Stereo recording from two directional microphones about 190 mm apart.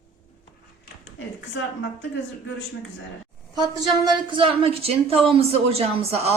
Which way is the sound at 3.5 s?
20° right (ahead or behind).